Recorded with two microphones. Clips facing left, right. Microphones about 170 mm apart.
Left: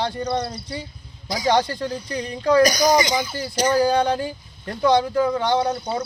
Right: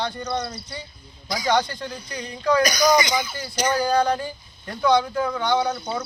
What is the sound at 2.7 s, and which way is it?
A man's voice, 40° left (ahead or behind).